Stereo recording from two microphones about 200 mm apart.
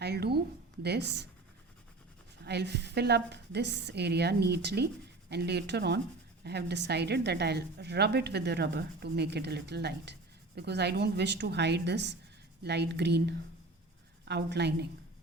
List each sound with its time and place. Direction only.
0.0 s a sound: 55° right (ahead or behind)
0.8 s speech: 55° right (ahead or behind)
2.4 s speech: 55° right (ahead or behind)